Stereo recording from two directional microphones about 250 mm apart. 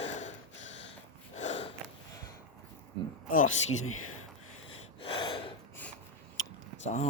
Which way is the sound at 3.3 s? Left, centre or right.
Left.